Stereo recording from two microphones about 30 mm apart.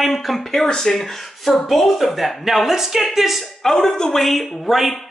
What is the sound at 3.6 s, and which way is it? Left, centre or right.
Speech, centre.